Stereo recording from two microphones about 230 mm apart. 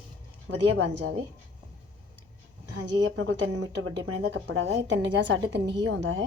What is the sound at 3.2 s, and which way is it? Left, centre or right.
A woman's voice, right.